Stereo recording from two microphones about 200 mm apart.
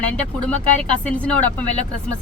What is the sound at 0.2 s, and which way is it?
A woman's voice, 5° left (ahead or behind).